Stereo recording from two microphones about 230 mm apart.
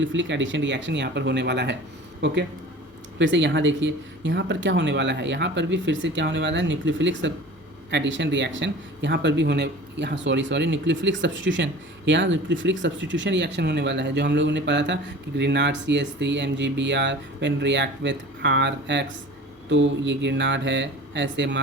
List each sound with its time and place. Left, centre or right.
0.0 s speech: right